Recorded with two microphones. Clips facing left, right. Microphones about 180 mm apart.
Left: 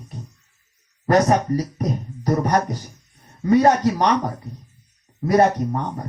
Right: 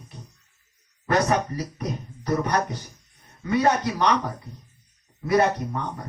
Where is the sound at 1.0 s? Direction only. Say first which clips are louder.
Left 5 dB; 40° left (ahead or behind).